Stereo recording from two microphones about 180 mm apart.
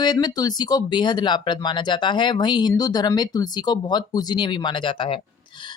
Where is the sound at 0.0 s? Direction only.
25° left (ahead or behind).